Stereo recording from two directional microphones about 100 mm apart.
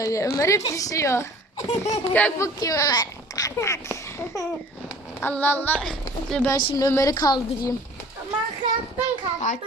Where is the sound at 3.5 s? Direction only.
30° left (ahead or behind).